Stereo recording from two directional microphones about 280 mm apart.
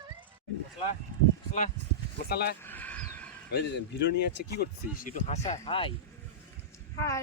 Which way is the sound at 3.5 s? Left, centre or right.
Left.